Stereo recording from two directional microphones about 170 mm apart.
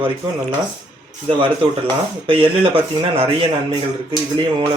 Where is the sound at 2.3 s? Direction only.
30° right (ahead or behind).